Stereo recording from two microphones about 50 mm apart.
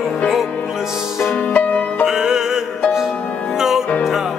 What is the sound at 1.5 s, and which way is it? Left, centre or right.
Music, left.